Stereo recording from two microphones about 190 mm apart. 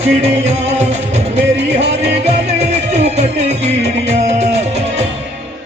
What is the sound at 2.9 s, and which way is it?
Music, 35° right (ahead or behind).